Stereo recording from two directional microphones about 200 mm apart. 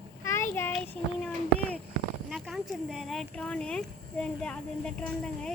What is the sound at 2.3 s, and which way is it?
Speech, centre (ahead or behind).